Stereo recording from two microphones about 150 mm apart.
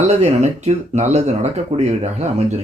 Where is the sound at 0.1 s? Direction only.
45° right (ahead or behind).